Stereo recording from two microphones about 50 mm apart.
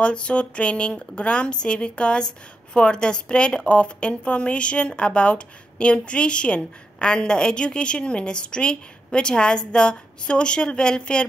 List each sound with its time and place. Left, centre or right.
0.0 s speech: left